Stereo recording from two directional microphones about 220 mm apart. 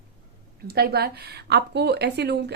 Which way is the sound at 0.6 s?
45° right (ahead or behind).